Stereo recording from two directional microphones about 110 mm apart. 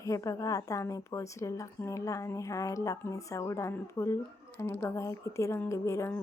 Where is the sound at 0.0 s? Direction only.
30° left (ahead or behind).